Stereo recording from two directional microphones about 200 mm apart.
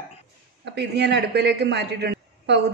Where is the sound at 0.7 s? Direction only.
55° right (ahead or behind).